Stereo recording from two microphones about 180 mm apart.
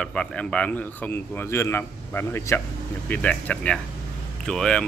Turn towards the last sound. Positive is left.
turn(degrees=5)  # may be behind; listen again after turning